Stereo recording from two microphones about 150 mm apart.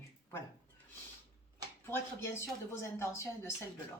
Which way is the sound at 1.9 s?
15° left (ahead or behind).